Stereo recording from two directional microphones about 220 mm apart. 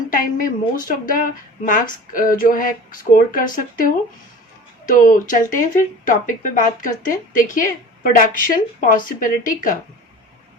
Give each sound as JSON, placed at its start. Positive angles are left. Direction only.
{"t": 0.1, "sound": "a woman's voice", "side_deg": 40}